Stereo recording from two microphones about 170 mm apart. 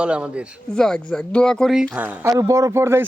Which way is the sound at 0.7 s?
5° left (ahead or behind).